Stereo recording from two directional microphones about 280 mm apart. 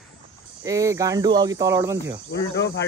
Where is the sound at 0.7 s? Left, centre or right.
Centre.